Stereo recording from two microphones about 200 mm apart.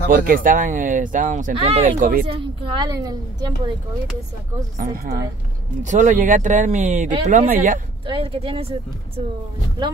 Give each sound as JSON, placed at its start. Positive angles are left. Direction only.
{"t": 0.1, "sound": "speech", "side_deg": -45}
{"t": 2.2, "sound": "a woman's voice", "side_deg": -25}
{"t": 4.7, "sound": "speech", "side_deg": -45}
{"t": 5.8, "sound": "speech", "side_deg": -40}
{"t": 8.1, "sound": "a woman's voice", "side_deg": -25}